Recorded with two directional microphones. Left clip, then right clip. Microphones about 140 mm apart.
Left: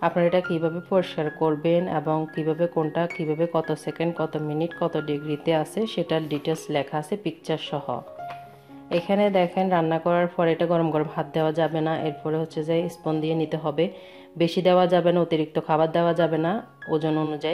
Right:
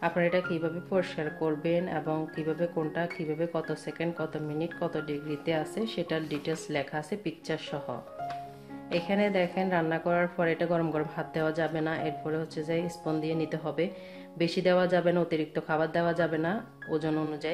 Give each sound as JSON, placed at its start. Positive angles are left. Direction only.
{"t": 0.0, "sound": "speech", "side_deg": 40}
{"t": 8.9, "sound": "speech", "side_deg": 40}